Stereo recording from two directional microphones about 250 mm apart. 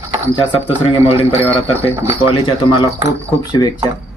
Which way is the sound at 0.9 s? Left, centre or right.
Left.